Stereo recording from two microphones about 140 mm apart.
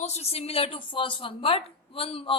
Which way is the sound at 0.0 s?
50° left (ahead or behind).